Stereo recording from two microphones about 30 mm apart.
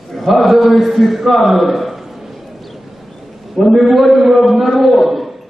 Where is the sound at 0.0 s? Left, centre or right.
Centre.